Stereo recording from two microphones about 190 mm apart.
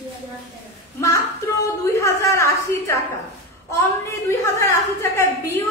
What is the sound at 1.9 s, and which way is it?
A woman's voice, 15° left (ahead or behind).